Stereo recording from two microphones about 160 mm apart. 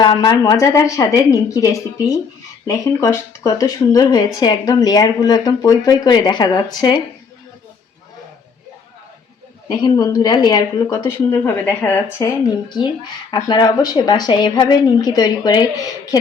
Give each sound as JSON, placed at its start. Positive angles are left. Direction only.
{"t": 0.0, "sound": "speech", "side_deg": 25}
{"t": 9.6, "sound": "speech", "side_deg": 25}
{"t": 10.8, "sound": "speech", "side_deg": 15}
{"t": 12.6, "sound": "speech", "side_deg": 30}